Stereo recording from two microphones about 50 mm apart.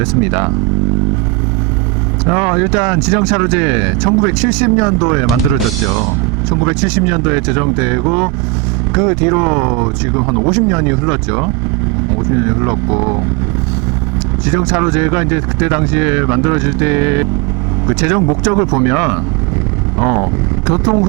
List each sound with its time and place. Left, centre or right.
0.0 s speech: centre
2.2 s speech: right
6.5 s speech: right
14.4 s speech: centre
20.7 s speech: centre